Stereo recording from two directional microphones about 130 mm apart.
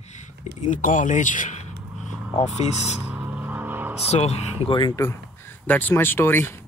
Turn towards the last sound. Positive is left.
turn(degrees=15)  # may be behind; listen again after turning